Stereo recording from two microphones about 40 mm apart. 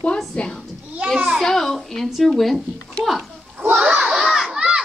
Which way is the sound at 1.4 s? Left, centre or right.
Centre.